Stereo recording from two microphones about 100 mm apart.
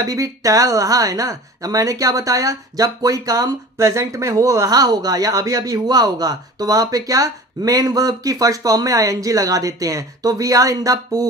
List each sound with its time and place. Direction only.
0.0 s speech: 35° right (ahead or behind)